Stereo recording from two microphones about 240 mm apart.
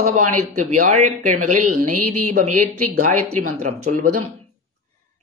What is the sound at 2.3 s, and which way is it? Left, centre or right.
Speech, right.